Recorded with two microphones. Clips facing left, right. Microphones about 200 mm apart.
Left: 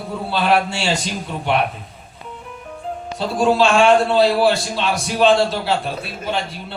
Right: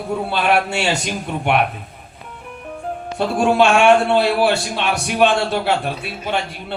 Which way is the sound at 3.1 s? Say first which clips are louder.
Right 1 dB; 65° right (ahead or behind).